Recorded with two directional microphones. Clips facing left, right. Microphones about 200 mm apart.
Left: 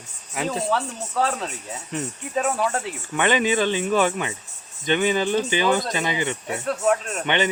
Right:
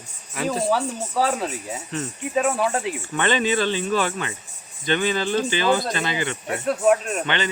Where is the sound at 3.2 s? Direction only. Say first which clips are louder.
Left 1 dB; 15° left (ahead or behind).